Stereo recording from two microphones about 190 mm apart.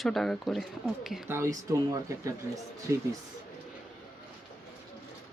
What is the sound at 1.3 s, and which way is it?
Speech, 15° right (ahead or behind).